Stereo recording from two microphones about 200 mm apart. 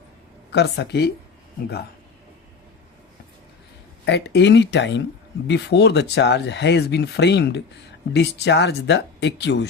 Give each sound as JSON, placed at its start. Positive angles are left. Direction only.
{"t": 0.5, "sound": "speech", "side_deg": 55}
{"t": 4.0, "sound": "speech", "side_deg": 60}